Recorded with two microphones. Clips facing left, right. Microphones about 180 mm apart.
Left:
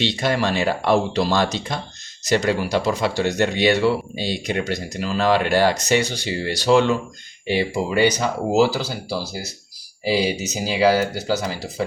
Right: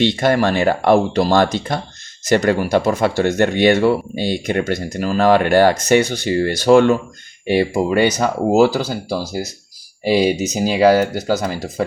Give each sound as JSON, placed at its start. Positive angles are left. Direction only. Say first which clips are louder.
{"t": 0.0, "sound": "speech", "louder": "right 6 dB", "side_deg": -50}